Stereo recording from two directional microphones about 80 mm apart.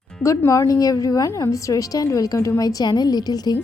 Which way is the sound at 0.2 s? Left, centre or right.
Left.